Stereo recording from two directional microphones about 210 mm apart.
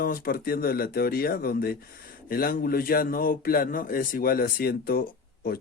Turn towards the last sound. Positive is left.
turn(degrees=45)  # may be behind; listen again after turning